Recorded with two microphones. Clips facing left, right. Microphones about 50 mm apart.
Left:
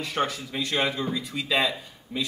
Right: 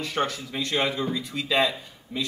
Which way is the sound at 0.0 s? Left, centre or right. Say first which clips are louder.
Even; centre.